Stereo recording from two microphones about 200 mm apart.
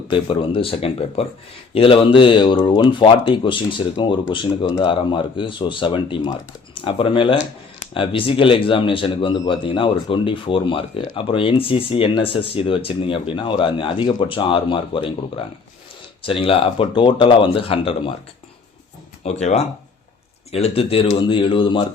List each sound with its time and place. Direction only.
0.1 s speech: 25° left (ahead or behind)
16.2 s speech: 25° left (ahead or behind)
19.2 s speech: 35° left (ahead or behind)